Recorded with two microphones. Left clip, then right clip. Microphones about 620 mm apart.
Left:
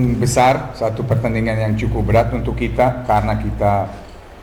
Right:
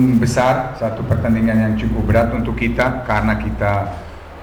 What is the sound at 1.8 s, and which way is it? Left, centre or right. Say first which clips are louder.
A man's voice: left 3 dB; centre.